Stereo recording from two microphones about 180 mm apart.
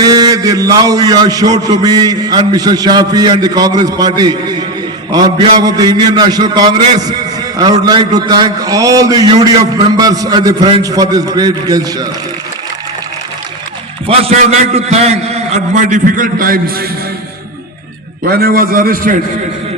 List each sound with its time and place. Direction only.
0.0 s a man's voice: 20° right (ahead or behind)
14.1 s a man's voice: 35° right (ahead or behind); by 16.7 s 50° right (ahead or behind)
18.3 s a man's voice: 55° right (ahead or behind)